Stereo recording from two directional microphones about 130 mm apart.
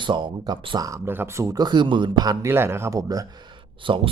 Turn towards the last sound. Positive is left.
turn(degrees=-40)  # may be behind; listen again after turning